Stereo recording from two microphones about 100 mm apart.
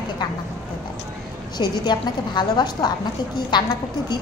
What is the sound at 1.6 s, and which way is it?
A woman's voice, 45° left (ahead or behind).